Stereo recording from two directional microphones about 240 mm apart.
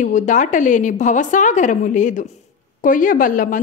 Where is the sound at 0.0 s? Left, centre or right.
Left.